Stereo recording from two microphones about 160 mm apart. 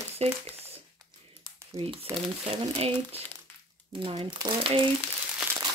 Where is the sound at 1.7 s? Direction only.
35° right (ahead or behind).